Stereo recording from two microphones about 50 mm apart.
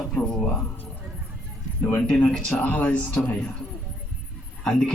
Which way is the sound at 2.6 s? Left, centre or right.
Left.